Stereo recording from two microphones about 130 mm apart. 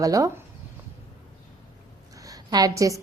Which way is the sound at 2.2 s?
30° right (ahead or behind).